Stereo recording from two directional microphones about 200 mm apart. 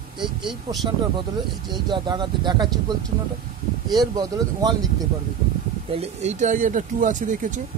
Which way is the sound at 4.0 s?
20° right (ahead or behind).